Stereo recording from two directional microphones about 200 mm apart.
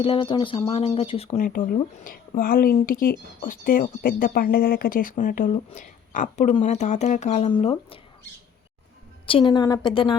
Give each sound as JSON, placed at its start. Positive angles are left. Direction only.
{"t": 0.0, "sound": "a woman's voice", "side_deg": 25}
{"t": 1.4, "sound": "a woman's voice", "side_deg": 45}
{"t": 9.2, "sound": "a woman's voice", "side_deg": 25}